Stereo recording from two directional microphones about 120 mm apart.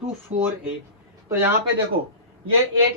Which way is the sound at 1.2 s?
20° right (ahead or behind).